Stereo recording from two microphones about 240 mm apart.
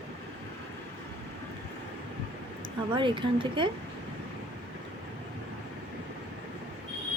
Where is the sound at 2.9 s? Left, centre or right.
Centre.